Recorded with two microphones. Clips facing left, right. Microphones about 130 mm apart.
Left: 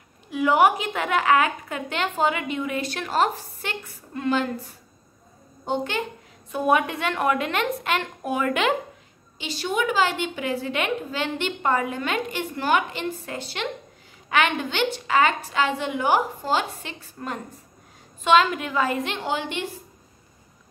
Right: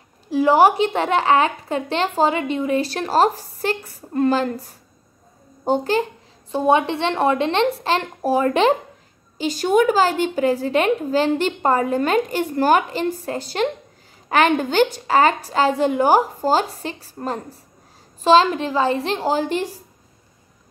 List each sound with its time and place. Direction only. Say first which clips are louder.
0.3 s a woman's voice: right 4 dB; 30° right (ahead or behind)
5.7 s a woman's voice: right 7 dB; 35° right (ahead or behind)
9.4 s a woman's voice: right 9 dB; 45° right (ahead or behind)